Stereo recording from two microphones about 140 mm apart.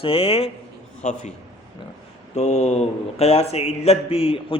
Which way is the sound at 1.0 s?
60° left (ahead or behind).